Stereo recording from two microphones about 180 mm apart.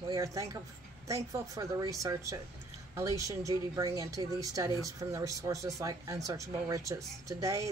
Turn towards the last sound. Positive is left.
turn(degrees=-15)  # may be behind; listen again after turning